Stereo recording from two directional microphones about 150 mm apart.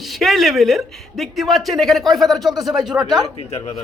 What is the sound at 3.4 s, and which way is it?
Speech, 45° left (ahead or behind).